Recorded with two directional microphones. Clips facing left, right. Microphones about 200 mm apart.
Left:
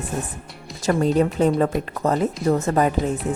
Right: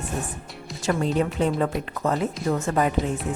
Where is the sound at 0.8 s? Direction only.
40° left (ahead or behind).